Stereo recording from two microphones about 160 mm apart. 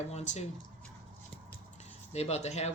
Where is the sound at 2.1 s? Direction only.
40° left (ahead or behind).